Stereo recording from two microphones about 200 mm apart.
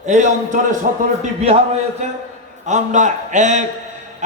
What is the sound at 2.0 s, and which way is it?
A man's voice, 35° right (ahead or behind).